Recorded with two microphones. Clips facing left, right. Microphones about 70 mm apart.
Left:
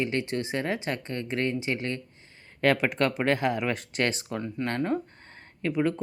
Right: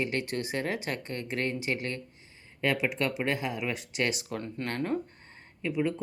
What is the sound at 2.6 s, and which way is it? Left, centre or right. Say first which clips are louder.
Speech: left 5 dB; left.